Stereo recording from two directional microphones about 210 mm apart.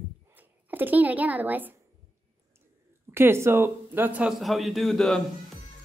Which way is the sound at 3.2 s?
10° right (ahead or behind).